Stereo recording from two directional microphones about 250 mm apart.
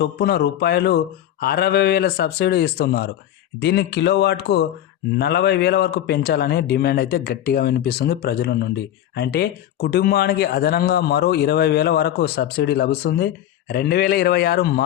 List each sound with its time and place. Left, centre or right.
0.0 s speech: left